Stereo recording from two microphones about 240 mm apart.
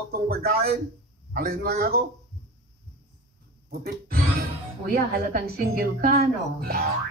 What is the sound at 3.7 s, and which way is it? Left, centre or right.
Speech, right.